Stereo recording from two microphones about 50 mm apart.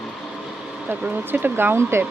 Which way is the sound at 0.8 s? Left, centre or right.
Right.